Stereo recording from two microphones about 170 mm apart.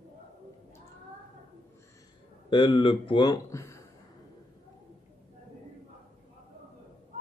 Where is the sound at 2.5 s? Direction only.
30° left (ahead or behind).